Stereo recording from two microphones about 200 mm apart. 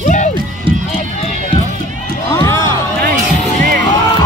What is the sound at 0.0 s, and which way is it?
Run, 35° left (ahead or behind).